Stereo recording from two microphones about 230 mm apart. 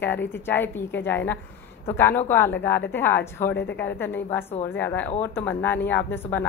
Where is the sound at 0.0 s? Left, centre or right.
Centre.